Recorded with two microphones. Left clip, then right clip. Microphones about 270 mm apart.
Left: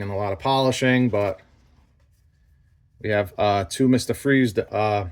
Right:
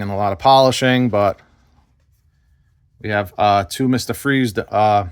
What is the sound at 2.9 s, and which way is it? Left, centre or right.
Speech, right.